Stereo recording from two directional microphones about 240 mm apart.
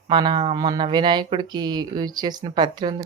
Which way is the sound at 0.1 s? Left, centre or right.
Centre.